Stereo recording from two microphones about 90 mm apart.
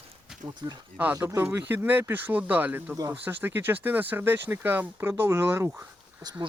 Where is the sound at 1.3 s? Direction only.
30° right (ahead or behind).